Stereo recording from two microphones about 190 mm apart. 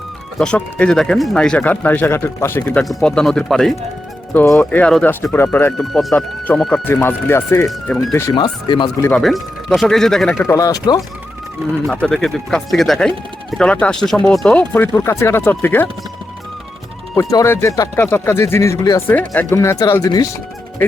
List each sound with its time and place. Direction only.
0.3 s speech: 5° left (ahead or behind)
5.7 s speech: centre (ahead or behind)
8.4 s speech: 25° left (ahead or behind)
9.0 s speech: 5° left (ahead or behind)
10.4 s speech: 15° left (ahead or behind)
12.0 s speech: 5° left (ahead or behind)
17.3 s speech: 15° left (ahead or behind)